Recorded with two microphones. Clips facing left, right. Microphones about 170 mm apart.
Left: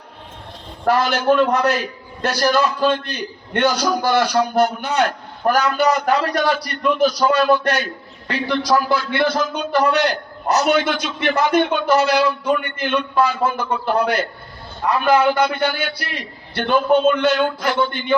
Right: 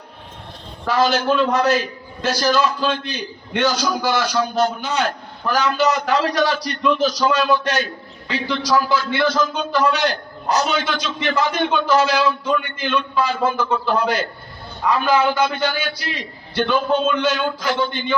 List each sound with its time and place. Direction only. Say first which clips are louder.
0.9 s a man's voice: left 2 dB; 60° left (ahead or behind)